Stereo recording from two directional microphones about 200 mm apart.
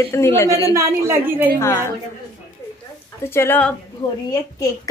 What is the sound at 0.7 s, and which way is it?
Speech, 10° right (ahead or behind).